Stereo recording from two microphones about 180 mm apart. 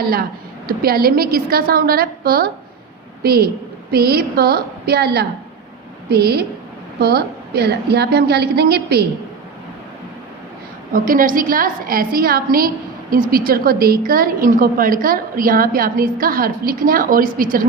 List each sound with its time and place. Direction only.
0.0 s a woman's voice: 55° right (ahead or behind)
10.9 s a woman's voice: 50° right (ahead or behind)